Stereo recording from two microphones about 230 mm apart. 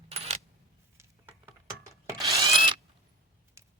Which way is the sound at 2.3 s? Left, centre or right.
Right.